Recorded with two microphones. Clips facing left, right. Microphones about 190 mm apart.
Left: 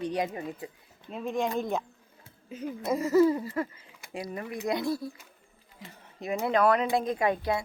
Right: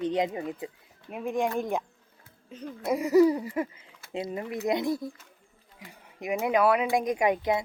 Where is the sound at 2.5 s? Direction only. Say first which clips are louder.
Left 4 dB; 10° left (ahead or behind).